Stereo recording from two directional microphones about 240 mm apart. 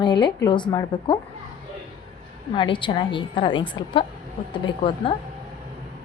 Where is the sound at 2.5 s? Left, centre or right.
Centre.